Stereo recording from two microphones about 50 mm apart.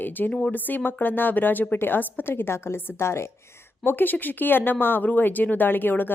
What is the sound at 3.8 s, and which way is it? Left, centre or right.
Speech, left.